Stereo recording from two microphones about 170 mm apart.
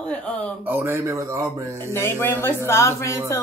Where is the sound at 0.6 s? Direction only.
10° right (ahead or behind).